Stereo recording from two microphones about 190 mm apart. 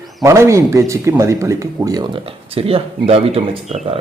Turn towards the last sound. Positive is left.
turn(degrees=-30)  # may be behind; listen again after turning